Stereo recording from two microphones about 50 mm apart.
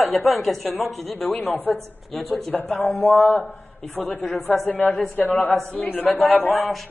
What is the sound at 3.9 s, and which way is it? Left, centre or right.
A woman's voice, left.